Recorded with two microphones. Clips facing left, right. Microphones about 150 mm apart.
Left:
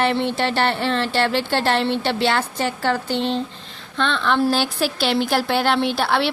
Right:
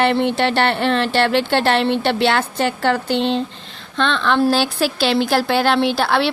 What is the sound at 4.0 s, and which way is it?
A woman's voice, 90° right.